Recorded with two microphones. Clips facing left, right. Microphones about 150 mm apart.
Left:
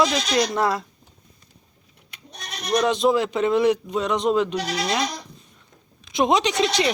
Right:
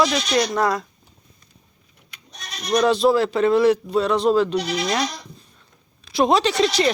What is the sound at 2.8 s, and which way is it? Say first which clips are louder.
A man's voice: right 3 dB; 15° left (ahead or behind).